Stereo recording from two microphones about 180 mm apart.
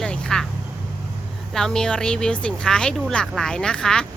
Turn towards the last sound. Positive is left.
turn(degrees=5)  # may be behind; listen again after turning